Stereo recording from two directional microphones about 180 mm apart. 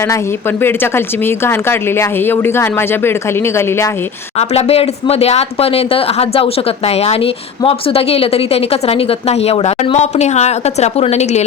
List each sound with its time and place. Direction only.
0.0 s speech: 15° left (ahead or behind)
4.4 s speech: 35° left (ahead or behind)